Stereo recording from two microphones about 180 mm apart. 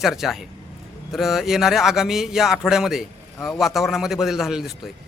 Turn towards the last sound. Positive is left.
turn(degrees=0)  # may be behind; listen again after turning